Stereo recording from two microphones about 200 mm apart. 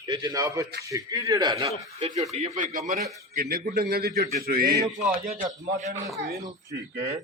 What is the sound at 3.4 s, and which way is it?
A man's voice, 50° right (ahead or behind).